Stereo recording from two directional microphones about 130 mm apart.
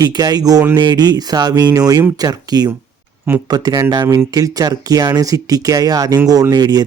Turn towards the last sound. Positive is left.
turn(degrees=-30)  # may be behind; listen again after turning